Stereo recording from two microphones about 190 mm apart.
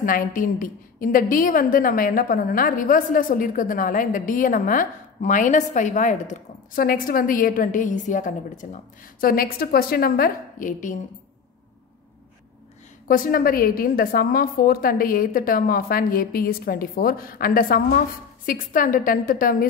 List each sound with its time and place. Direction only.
0.0 s a woman's voice: 45° left (ahead or behind)
13.1 s a woman's voice: 50° left (ahead or behind)